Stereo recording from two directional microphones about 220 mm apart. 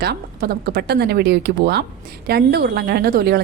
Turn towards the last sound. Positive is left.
turn(degrees=-45)  # may be behind; listen again after turning